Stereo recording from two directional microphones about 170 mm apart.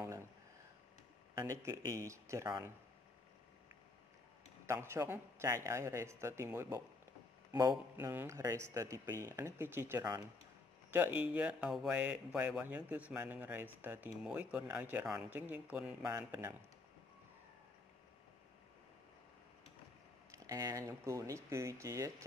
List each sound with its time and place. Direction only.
1.3 s speech: 15° right (ahead or behind)
4.6 s speech: 15° right (ahead or behind)
8.0 s speech: 15° right (ahead or behind)
20.2 s speech: 20° right (ahead or behind)